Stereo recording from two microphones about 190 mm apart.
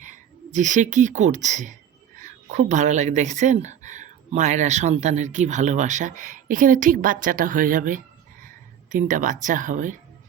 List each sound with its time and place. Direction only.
0.0 s speech: 40° right (ahead or behind)